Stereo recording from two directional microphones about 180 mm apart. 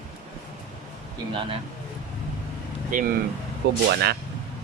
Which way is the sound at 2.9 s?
50° right (ahead or behind).